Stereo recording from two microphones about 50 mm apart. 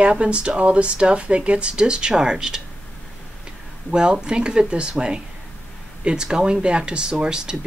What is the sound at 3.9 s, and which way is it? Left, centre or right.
Speech, centre.